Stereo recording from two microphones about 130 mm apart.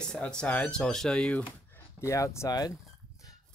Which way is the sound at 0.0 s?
5° left (ahead or behind).